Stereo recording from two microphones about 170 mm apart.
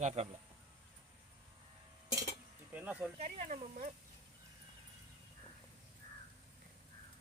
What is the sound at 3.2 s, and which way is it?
Speech, 40° right (ahead or behind).